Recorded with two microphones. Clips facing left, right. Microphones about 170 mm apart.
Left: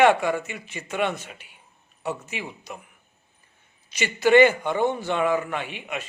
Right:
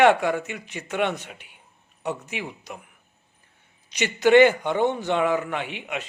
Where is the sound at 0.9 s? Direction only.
10° left (ahead or behind).